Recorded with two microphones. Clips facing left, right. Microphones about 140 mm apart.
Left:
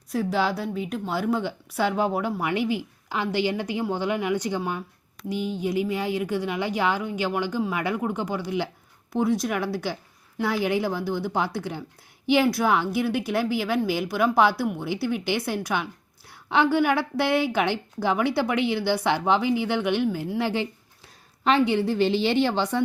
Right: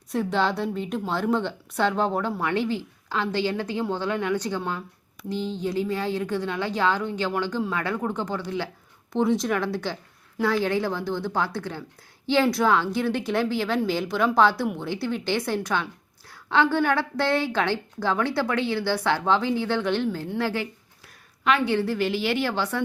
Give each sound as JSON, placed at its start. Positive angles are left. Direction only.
{"t": 0.1, "sound": "a woman's voice", "side_deg": 5}
{"t": 9.1, "sound": "a woman's voice", "side_deg": 5}
{"t": 20.4, "sound": "a woman's voice", "side_deg": 20}